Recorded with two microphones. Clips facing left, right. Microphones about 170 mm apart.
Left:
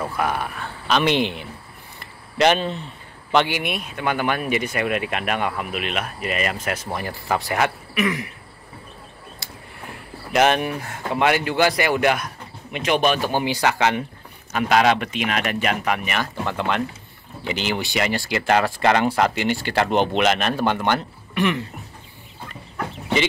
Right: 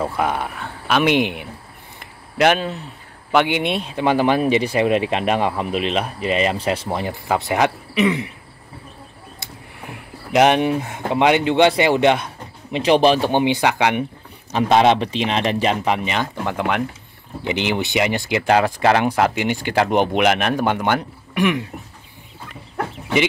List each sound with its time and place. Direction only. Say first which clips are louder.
0.0 s speech: right 3 dB; 25° right (ahead or behind)
0.8 s speech: right 3 dB; 10° right (ahead or behind)
3.4 s speech: right 5 dB; 25° right (ahead or behind)
9.4 s a sound: right 3 dB; 20° right (ahead or behind)
10.3 s speech: right 4 dB; 20° right (ahead or behind)
14.5 s speech: right 3 dB; 25° right (ahead or behind); by 21.6 s 10° right (ahead or behind)